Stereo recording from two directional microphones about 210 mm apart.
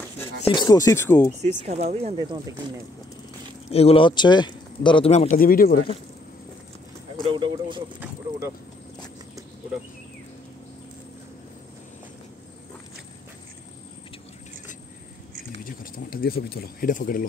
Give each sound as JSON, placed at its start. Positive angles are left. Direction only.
{"t": 0.4, "sound": "speech", "side_deg": 20}
{"t": 1.4, "sound": "speech", "side_deg": -30}
{"t": 3.7, "sound": "speech", "side_deg": 25}
{"t": 7.2, "sound": "speech", "side_deg": -20}
{"t": 15.6, "sound": "speech", "side_deg": 45}